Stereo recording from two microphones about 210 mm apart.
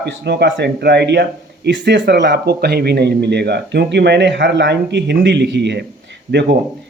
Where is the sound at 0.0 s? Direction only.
55° right (ahead or behind).